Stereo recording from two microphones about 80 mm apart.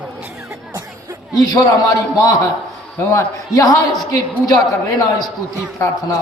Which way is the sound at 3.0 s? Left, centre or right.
Left.